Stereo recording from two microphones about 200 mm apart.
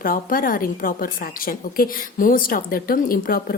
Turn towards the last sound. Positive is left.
turn(degrees=45)  # may be behind; listen again after turning